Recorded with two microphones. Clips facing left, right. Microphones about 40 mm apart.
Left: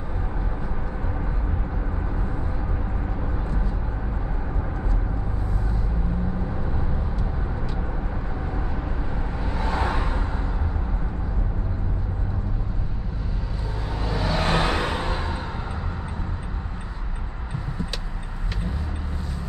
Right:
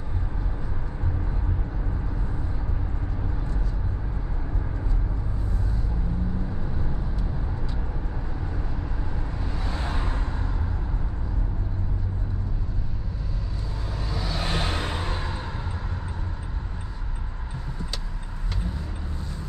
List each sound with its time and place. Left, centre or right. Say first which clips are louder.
9.6 s vehicle: left 8 dB; left
14.0 s vehicle: left 7 dB; left